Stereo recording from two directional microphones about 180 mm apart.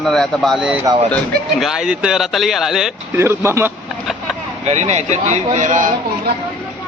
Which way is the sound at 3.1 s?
15° right (ahead or behind).